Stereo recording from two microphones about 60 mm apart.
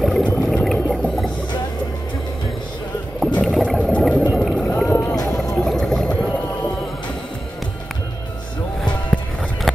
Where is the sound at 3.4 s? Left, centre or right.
Centre.